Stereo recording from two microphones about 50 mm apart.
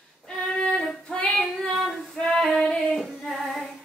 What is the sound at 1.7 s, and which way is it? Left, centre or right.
Female singing, centre.